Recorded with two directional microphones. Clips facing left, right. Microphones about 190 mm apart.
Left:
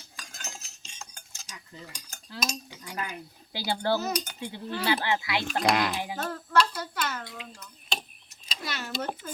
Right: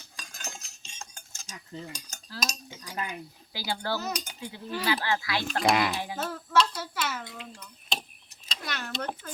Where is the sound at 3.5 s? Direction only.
25° left (ahead or behind).